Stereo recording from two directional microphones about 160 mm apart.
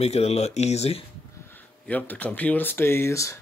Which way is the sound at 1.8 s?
10° left (ahead or behind).